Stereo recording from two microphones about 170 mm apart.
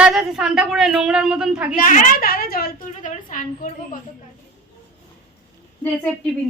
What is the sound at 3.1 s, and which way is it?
Speech, 50° left (ahead or behind).